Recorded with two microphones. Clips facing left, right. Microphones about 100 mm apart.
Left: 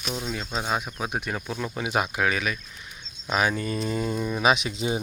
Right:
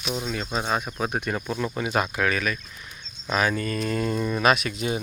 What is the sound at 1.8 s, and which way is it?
Speech, 10° left (ahead or behind).